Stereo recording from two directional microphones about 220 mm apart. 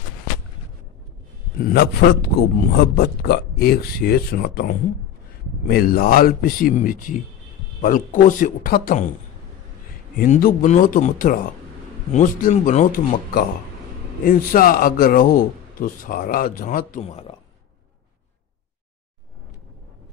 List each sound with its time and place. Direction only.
1.6 s speech: 45° left (ahead or behind)
10.1 s speech: 40° left (ahead or behind)